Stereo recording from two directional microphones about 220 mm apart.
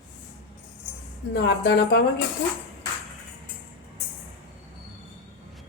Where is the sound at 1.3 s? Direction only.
50° left (ahead or behind).